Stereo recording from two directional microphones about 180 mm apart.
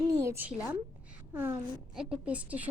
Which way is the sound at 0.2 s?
15° right (ahead or behind).